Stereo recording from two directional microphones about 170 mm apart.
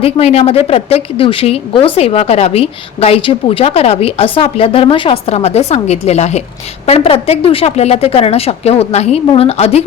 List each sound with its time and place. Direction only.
0.0 s a woman's voice: 35° left (ahead or behind)